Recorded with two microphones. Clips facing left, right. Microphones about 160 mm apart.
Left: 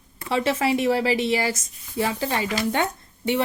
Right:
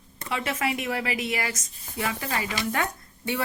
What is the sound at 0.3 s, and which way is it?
A woman's voice, 30° left (ahead or behind).